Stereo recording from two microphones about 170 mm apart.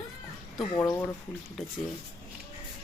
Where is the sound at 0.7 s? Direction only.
25° left (ahead or behind).